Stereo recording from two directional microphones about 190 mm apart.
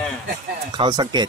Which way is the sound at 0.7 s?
25° right (ahead or behind).